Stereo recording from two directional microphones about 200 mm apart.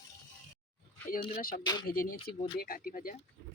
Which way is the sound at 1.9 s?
45° left (ahead or behind).